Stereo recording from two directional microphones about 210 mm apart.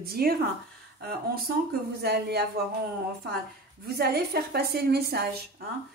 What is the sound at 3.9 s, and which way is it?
Speech, 50° right (ahead or behind).